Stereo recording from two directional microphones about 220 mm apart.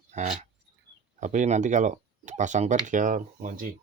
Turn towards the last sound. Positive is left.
turn(degrees=-40)  # may be behind; listen again after turning